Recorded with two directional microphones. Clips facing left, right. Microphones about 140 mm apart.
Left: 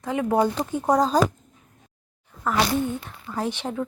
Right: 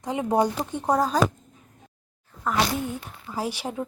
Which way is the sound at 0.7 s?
5° left (ahead or behind).